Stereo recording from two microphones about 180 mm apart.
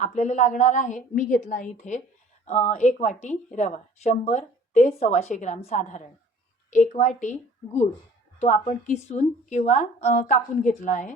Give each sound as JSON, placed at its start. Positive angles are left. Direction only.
{"t": 0.0, "sound": "a woman's voice", "side_deg": 40}